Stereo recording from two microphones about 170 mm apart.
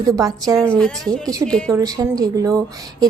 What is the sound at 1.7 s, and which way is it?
Speech, 20° right (ahead or behind).